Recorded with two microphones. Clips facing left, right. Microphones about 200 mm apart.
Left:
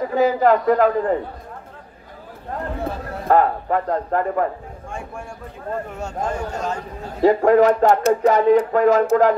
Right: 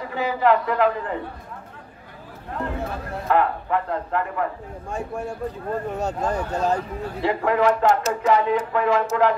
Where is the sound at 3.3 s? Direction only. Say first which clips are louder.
Left 4 dB; 40° left (ahead or behind).